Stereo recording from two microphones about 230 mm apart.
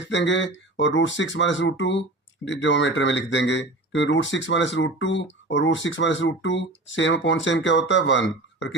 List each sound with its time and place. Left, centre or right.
0.1 s speech: left